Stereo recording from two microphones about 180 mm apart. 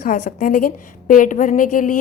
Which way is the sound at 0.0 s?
50° left (ahead or behind).